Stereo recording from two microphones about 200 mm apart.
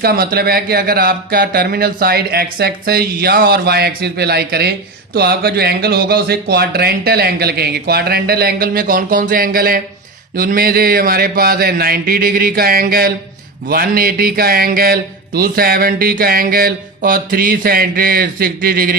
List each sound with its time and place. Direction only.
0.0 s a man's voice: 50° right (ahead or behind)